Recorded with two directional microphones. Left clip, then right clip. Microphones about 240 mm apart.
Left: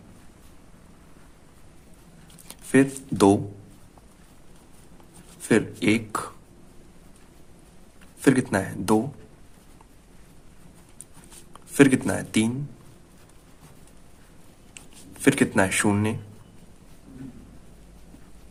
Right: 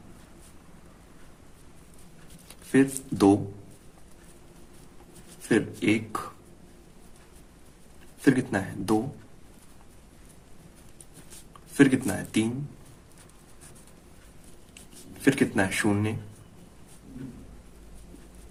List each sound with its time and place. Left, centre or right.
2.7 s speech: left
5.5 s speech: left
8.2 s speech: left
11.8 s speech: left
15.2 s speech: left